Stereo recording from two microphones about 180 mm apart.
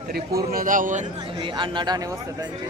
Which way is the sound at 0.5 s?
50° right (ahead or behind).